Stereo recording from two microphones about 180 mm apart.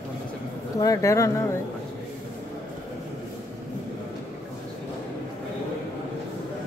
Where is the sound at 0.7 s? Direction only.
20° left (ahead or behind).